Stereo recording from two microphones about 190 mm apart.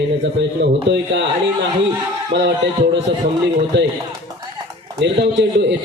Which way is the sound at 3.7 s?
65° right (ahead or behind).